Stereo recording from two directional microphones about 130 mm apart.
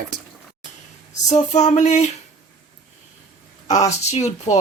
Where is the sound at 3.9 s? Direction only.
55° left (ahead or behind).